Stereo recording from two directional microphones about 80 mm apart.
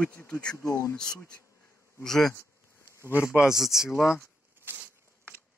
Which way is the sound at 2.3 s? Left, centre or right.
Left.